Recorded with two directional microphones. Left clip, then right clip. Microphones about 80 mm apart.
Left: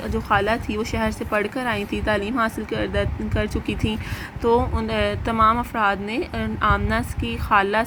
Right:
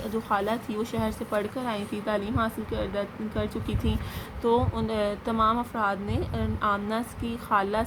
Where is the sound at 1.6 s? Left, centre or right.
Left.